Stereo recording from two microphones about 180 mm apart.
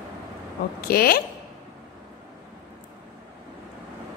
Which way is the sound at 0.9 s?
55° left (ahead or behind).